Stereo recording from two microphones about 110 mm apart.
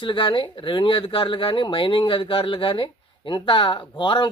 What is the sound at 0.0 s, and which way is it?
Speech, 45° left (ahead or behind).